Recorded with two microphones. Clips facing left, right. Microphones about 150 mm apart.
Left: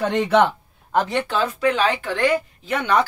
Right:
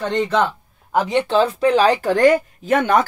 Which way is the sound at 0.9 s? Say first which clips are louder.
Right 3 dB; 15° right (ahead or behind).